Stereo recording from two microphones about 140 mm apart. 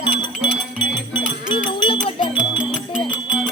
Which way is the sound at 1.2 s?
35° left (ahead or behind).